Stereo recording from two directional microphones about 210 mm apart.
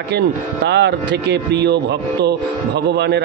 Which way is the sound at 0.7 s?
55° right (ahead or behind).